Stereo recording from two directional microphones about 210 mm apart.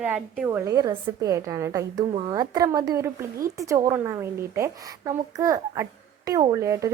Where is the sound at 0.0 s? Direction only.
5° right (ahead or behind).